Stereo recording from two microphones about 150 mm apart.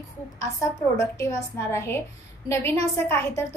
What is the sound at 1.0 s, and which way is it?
A woman's voice, 20° left (ahead or behind).